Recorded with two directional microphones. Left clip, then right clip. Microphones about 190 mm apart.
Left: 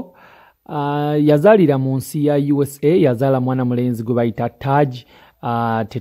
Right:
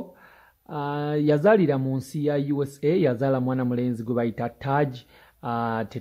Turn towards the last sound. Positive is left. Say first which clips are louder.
# left 8 dB
turn(degrees=30)  # may be behind; listen again after turning